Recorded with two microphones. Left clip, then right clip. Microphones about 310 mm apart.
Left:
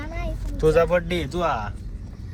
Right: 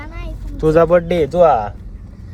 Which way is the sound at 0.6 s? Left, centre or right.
Right.